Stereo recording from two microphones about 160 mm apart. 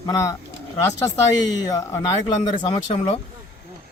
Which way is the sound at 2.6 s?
35° left (ahead or behind).